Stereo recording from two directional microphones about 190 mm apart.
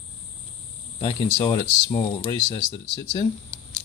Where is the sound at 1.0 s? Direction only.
20° left (ahead or behind).